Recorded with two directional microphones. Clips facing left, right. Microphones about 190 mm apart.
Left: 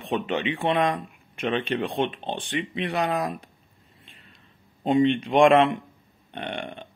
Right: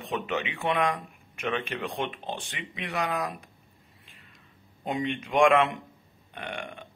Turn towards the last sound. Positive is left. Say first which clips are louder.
# left 4 dB
turn(degrees=30)  # may be behind; listen again after turning